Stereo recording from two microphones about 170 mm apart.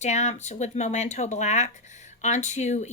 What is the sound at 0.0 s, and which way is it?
Speech, 40° left (ahead or behind).